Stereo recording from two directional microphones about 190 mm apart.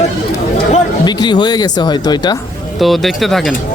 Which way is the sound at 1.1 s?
20° left (ahead or behind).